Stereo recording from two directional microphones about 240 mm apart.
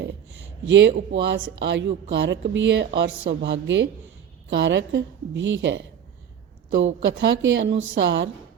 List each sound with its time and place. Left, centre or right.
0.0 s a woman's voice: right